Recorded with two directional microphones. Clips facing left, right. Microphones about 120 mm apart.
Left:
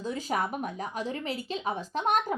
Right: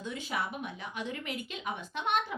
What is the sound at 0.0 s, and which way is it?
Speech, 40° left (ahead or behind).